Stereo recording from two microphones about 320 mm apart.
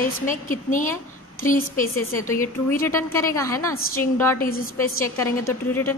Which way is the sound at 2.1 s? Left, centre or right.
Centre.